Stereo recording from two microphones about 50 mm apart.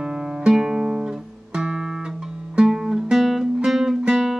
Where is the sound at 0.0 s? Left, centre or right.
Centre.